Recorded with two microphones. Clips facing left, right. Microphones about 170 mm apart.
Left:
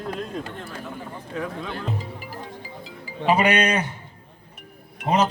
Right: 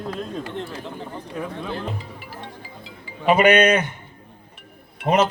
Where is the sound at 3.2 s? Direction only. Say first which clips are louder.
Right 4 dB; 35° left (ahead or behind).